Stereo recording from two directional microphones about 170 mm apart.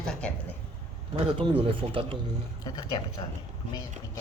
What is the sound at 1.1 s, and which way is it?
Speech, 30° right (ahead or behind).